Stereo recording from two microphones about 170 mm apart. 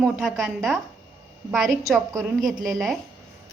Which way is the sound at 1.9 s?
Centre (ahead or behind).